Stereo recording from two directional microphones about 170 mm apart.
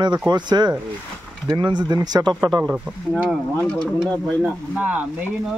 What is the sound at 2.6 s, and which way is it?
Speech, 5° right (ahead or behind).